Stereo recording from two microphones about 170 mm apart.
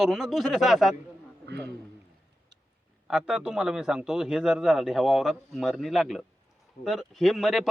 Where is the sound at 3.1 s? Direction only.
5° right (ahead or behind).